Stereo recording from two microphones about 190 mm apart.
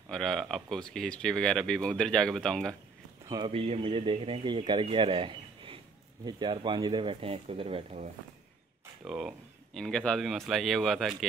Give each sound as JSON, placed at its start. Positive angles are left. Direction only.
{"t": 0.1, "sound": "speech", "side_deg": 0}
{"t": 3.3, "sound": "speech", "side_deg": -25}
{"t": 9.0, "sound": "speech", "side_deg": -5}